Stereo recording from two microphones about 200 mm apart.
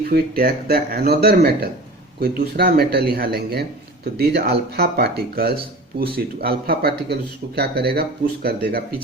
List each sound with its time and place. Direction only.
0.0 s a man's voice: 45° right (ahead or behind)